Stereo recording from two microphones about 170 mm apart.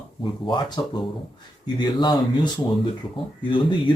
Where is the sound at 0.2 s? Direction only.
30° left (ahead or behind).